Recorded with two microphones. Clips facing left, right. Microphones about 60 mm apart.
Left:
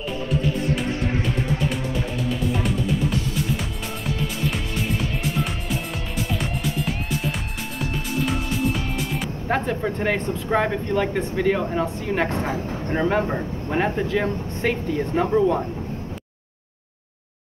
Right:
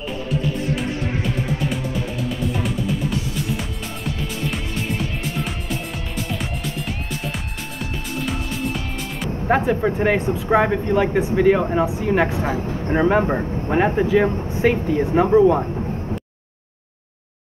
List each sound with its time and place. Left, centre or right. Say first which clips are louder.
3.5 s music: right 1 dB; centre
8.3 s music: even; centre
9.5 s speech: right 5 dB; centre